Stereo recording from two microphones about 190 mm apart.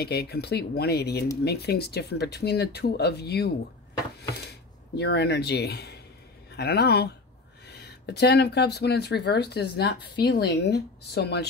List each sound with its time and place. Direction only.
0.0 s speech: 60° left (ahead or behind)